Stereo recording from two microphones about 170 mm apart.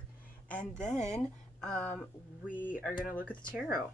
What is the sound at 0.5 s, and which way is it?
Speech, 45° left (ahead or behind).